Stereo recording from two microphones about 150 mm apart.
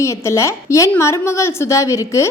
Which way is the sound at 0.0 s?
20° left (ahead or behind).